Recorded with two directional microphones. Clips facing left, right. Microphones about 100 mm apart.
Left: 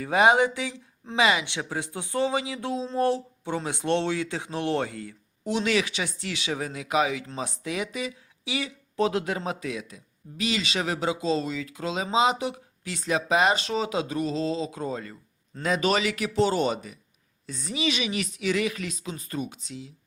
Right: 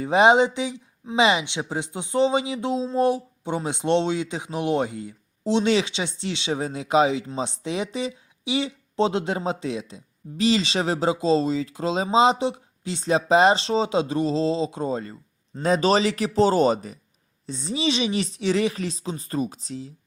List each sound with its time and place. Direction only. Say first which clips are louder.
0.0 s a woman's voice: right 3 dB; 20° right (ahead or behind)
17.4 s a woman's voice: right 3 dB; 25° right (ahead or behind)